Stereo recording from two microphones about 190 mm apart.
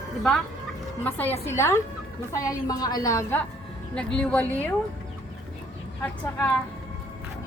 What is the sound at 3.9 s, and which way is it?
Speech, 5° left (ahead or behind).